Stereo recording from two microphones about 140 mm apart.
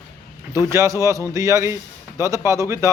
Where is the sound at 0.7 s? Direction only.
20° right (ahead or behind).